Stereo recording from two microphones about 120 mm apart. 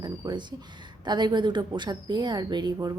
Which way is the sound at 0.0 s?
40° right (ahead or behind).